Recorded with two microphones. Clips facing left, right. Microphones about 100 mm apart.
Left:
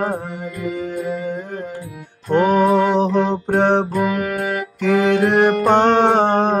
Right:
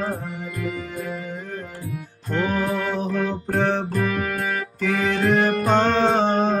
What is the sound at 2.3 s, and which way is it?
Music, 65° left (ahead or behind).